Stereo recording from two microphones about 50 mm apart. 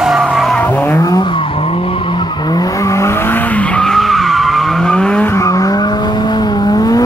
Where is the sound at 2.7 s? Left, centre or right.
Left.